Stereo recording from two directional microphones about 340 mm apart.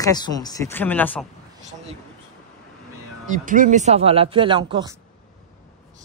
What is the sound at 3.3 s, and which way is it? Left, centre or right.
Speech, right.